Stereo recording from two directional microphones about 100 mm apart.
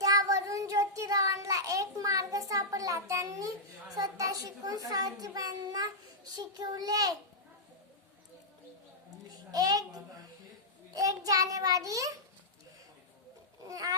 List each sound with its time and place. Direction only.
0.0 s child singing: 35° right (ahead or behind)
3.9 s a child's voice: 40° right (ahead or behind)
9.3 s a child's voice: 40° right (ahead or behind)
13.7 s a sound: 35° right (ahead or behind)